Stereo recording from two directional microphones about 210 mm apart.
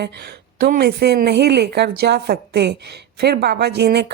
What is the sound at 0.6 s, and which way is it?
Speech, 50° right (ahead or behind).